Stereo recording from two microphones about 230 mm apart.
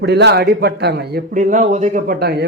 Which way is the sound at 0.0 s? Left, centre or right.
Right.